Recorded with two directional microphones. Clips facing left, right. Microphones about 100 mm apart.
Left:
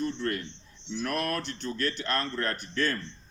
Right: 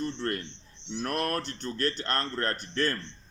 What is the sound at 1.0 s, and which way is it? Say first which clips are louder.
Speech: even; 40° right (ahead or behind).